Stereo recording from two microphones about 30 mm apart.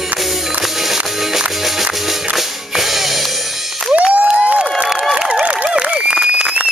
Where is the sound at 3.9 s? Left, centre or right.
Right.